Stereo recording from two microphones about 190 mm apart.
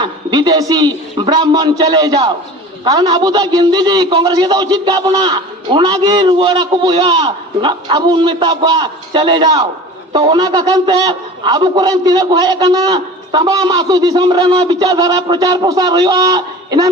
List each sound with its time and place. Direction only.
0.0 s a man's voice: 20° right (ahead or behind)